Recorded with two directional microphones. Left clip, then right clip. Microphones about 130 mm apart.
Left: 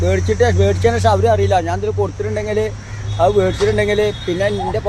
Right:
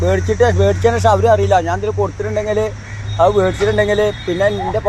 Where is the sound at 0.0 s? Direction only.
5° left (ahead or behind).